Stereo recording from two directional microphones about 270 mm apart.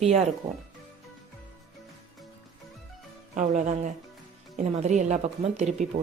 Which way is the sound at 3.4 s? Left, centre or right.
Right.